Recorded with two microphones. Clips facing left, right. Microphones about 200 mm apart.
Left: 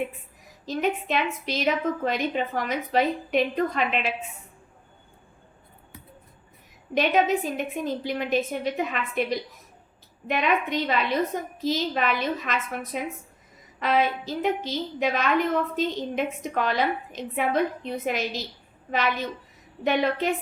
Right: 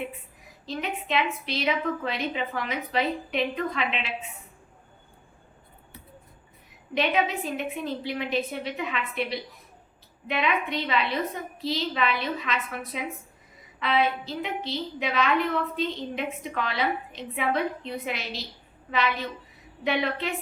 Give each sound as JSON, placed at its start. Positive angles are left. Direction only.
{"t": 0.6, "sound": "a woman's voice", "side_deg": 45}
{"t": 6.9, "sound": "a woman's voice", "side_deg": 45}
{"t": 19.8, "sound": "a woman's voice", "side_deg": 45}